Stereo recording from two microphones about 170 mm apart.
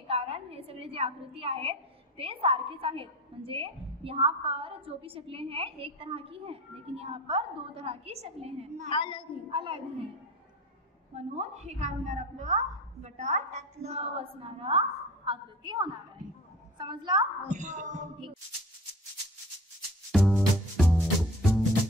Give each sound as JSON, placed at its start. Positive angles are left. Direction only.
{"t": 0.1, "sound": "a woman's voice", "side_deg": -35}
{"t": 8.9, "sound": "a woman's voice", "side_deg": 30}
{"t": 9.5, "sound": "a woman's voice", "side_deg": -30}
{"t": 11.1, "sound": "a woman's voice", "side_deg": -40}
{"t": 17.5, "sound": "a sound", "side_deg": -45}
{"t": 20.1, "sound": "music", "side_deg": 0}